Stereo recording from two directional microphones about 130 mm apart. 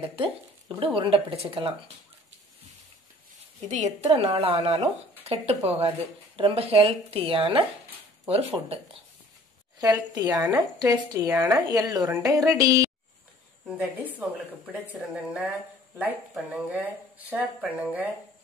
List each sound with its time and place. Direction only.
0.0 s speech: 45° right (ahead or behind)
3.6 s speech: 60° right (ahead or behind); by 7.6 s 45° right (ahead or behind)
10.1 s speech: 25° right (ahead or behind)
13.7 s speech: 10° right (ahead or behind)